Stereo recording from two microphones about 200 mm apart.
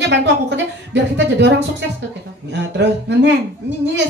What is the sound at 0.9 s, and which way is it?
Speech, 60° right (ahead or behind).